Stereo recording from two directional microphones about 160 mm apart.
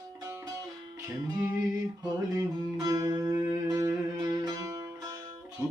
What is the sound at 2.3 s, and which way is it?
Music, 25° right (ahead or behind).